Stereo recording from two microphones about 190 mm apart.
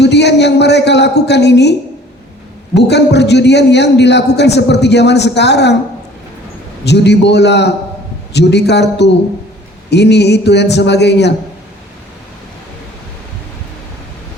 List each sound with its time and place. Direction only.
0.0 s a woman's voice: 65° left (ahead or behind)
2.7 s a man's voice: 65° left (ahead or behind)
6.8 s a man's voice: 65° left (ahead or behind)